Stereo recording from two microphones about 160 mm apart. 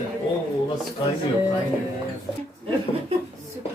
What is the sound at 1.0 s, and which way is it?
Speech, 30° left (ahead or behind).